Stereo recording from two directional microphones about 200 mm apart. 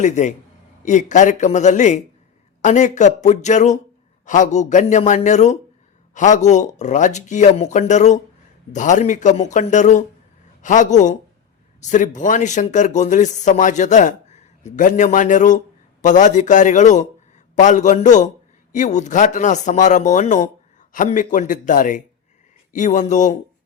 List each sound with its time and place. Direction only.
0.0 s speech: 40° left (ahead or behind)